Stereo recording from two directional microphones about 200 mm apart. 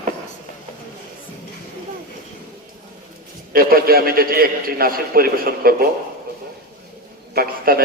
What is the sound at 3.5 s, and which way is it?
A man's voice, 45° right (ahead or behind).